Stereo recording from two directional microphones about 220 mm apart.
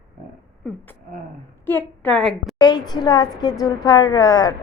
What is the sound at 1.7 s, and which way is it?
Speech, 10° left (ahead or behind).